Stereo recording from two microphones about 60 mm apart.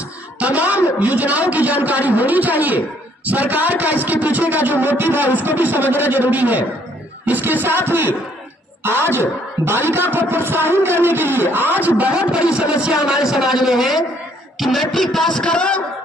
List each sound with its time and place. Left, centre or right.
0.4 s a sound: right
0.9 s a man's voice: right
12.3 s music: centre
12.9 s a man's voice: centre
15.4 s a man's voice: centre